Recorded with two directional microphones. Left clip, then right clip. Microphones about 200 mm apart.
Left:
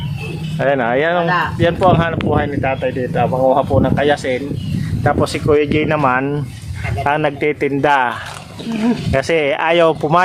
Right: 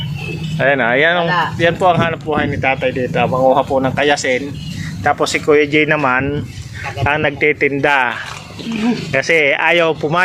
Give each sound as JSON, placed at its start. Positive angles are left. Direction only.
{"t": 0.6, "sound": "speech", "side_deg": 5}
{"t": 9.1, "sound": "speech", "side_deg": 15}